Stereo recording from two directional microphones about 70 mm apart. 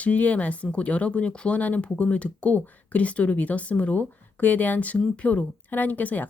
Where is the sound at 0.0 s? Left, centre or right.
Centre.